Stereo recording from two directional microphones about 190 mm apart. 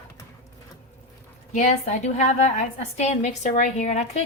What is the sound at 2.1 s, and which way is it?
A woman's voice, 40° left (ahead or behind).